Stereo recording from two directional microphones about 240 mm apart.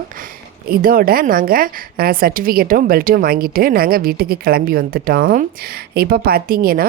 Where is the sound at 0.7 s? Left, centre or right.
Right.